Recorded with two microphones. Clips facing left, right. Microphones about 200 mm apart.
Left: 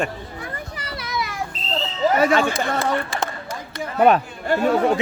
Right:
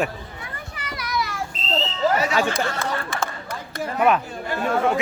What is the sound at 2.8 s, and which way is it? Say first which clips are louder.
A man's voice: left 4 dB; 30° left (ahead or behind).